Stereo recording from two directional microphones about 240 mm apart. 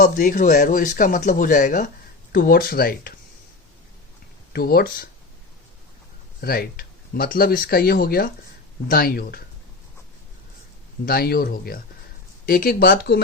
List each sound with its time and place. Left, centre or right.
0.0 s speech: left
4.5 s speech: left
6.4 s speech: left
11.0 s speech: left